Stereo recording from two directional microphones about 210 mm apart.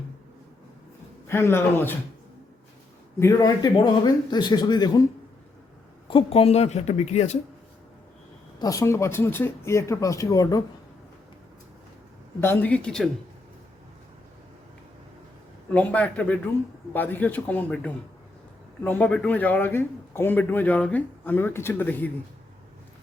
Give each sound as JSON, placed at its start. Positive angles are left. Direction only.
{"t": 1.3, "sound": "a man's voice", "side_deg": 10}
{"t": 3.2, "sound": "a man's voice", "side_deg": 15}
{"t": 6.1, "sound": "a woman's voice", "side_deg": 25}
{"t": 8.5, "sound": "a man's voice", "side_deg": 15}
{"t": 12.4, "sound": "a man's voice", "side_deg": 10}
{"t": 15.7, "sound": "a man's voice", "side_deg": 5}